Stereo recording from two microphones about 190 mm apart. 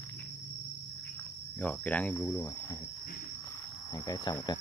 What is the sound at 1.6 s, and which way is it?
Cricket, 5° left (ahead or behind).